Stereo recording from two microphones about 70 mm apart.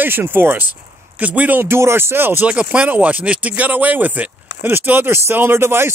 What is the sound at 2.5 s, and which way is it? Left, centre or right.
Speech, centre.